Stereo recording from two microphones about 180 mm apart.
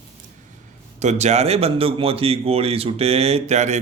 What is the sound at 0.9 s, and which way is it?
A man's voice, 40° right (ahead or behind).